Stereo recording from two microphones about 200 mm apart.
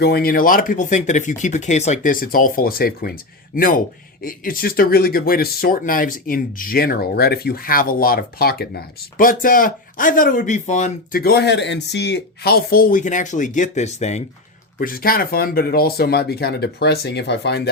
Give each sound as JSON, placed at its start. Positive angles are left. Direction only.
{"t": 0.0, "sound": "speech", "side_deg": 50}
{"t": 14.8, "sound": "speech", "side_deg": 45}